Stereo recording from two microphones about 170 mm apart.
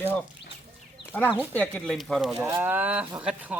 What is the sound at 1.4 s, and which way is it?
Speech, 10° left (ahead or behind).